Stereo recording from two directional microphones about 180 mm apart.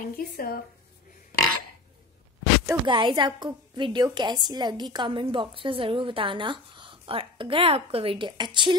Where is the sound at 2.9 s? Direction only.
25° right (ahead or behind).